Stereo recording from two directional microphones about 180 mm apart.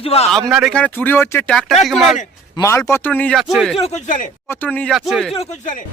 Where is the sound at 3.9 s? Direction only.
45° left (ahead or behind).